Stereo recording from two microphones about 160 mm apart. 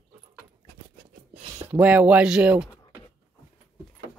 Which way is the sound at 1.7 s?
10° right (ahead or behind).